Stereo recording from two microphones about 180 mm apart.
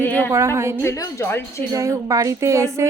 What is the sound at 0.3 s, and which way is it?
Speech, 15° right (ahead or behind).